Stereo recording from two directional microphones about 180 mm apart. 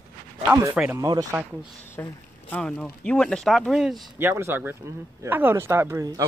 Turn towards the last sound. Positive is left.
turn(degrees=-15)  # may be behind; listen again after turning